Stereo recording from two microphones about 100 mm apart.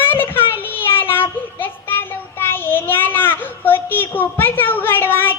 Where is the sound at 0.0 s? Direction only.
20° left (ahead or behind).